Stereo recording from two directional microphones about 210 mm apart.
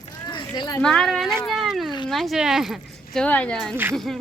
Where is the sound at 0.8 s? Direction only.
5° left (ahead or behind).